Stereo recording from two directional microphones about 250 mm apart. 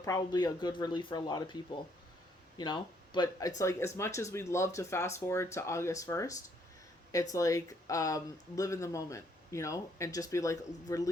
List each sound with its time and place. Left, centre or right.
0.0 s speech: centre